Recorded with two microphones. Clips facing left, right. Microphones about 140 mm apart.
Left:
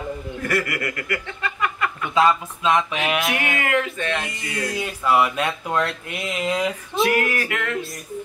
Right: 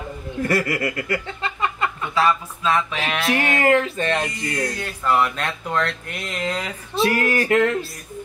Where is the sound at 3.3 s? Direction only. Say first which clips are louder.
Right 5 dB; 35° right (ahead or behind).